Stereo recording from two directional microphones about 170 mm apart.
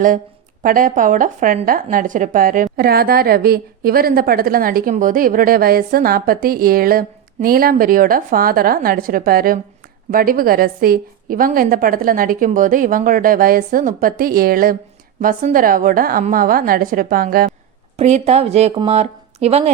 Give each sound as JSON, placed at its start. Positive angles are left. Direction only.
{"t": 0.6, "sound": "a woman's voice", "side_deg": -55}
{"t": 17.9, "sound": "speech", "side_deg": -40}